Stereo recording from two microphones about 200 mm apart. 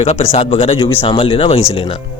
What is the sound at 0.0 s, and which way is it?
Speech, 30° left (ahead or behind).